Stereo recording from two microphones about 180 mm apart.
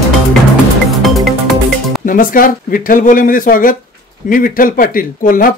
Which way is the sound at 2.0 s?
50° left (ahead or behind).